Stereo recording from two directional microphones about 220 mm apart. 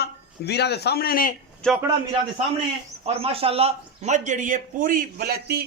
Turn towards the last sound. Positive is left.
turn(degrees=-45)  # may be behind; listen again after turning